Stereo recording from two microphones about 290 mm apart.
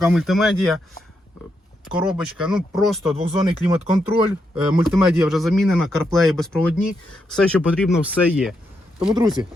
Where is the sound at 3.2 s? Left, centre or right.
Centre.